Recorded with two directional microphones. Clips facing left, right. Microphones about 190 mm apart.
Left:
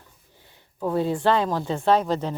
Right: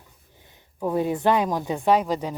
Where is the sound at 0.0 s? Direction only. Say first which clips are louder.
Even; 15° right (ahead or behind).